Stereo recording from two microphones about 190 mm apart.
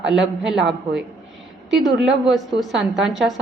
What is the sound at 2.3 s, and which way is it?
A woman's voice, centre (ahead or behind).